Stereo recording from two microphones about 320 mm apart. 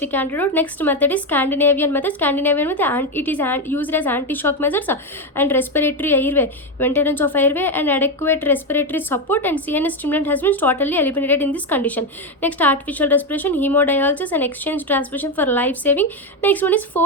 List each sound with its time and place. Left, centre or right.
0.0 s a woman's voice: centre